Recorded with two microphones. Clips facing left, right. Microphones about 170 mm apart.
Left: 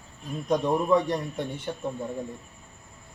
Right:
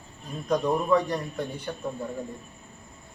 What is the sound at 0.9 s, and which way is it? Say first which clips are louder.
Speech: left 1 dB; 25° left (ahead or behind).